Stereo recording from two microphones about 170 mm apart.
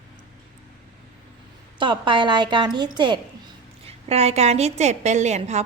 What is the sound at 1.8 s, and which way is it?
A woman's voice, 30° right (ahead or behind).